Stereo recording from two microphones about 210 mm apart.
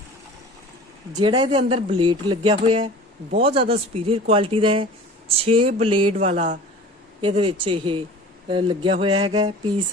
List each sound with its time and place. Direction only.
1.1 s speech: 20° right (ahead or behind)